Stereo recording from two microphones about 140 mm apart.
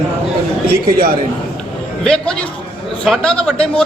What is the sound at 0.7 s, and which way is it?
Speech, 90° right.